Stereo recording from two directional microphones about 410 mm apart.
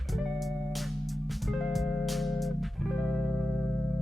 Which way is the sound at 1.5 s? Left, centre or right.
Centre.